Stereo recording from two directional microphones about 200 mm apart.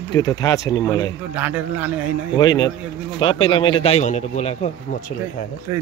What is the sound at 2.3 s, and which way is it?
A man's voice, 20° left (ahead or behind).